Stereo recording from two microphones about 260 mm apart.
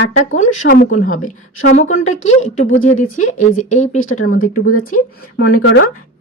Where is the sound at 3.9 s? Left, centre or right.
Left.